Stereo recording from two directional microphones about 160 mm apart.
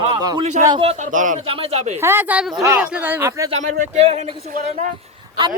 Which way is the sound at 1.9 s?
15° right (ahead or behind).